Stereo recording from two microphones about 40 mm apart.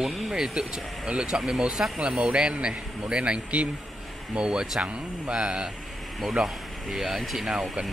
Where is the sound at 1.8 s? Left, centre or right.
Right.